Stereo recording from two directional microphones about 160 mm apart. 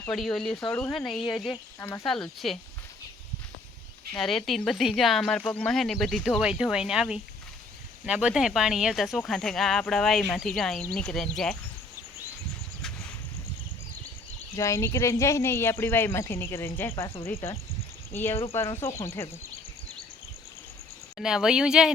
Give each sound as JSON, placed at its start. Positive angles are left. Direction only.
{"t": 0.0, "sound": "speech", "side_deg": 5}
{"t": 0.7, "sound": "speech", "side_deg": 15}
{"t": 0.9, "sound": "speech", "side_deg": 0}
{"t": 4.2, "sound": "speech", "side_deg": 0}
{"t": 14.5, "sound": "speech", "side_deg": 20}
{"t": 21.2, "sound": "speech", "side_deg": -5}